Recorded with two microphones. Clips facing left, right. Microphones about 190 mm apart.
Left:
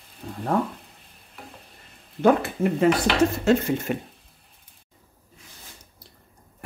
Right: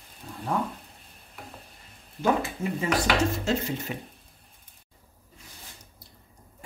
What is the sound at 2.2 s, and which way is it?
Speech, 60° left (ahead or behind).